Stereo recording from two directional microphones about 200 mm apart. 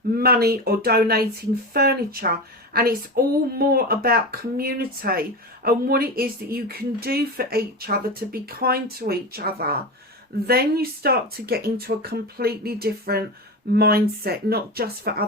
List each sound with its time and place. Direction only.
0.2 s speech: 50° right (ahead or behind)